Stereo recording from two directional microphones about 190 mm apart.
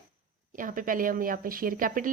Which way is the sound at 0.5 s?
45° right (ahead or behind).